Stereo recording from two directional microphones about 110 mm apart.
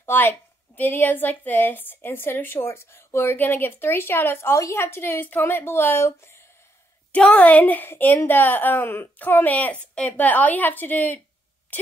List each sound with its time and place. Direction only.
0.0 s a woman's voice: 20° left (ahead or behind)
7.1 s a woman's voice: 10° left (ahead or behind)
11.7 s a sound: 15° left (ahead or behind)